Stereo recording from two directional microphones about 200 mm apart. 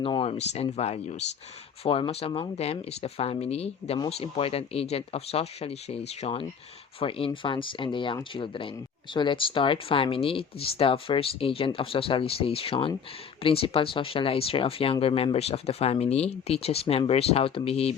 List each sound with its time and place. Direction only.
0.0 s speech: 25° left (ahead or behind)